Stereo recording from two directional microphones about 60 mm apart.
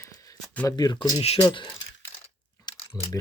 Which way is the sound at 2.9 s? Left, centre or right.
Centre.